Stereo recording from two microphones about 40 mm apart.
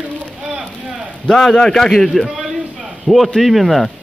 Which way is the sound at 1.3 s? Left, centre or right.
Centre.